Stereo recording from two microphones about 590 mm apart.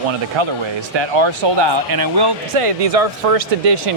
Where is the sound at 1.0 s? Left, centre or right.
Right.